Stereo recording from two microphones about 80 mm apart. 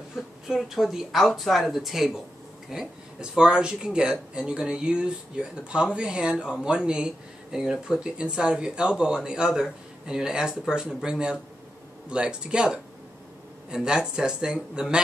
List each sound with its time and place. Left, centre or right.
0.2 s speech: centre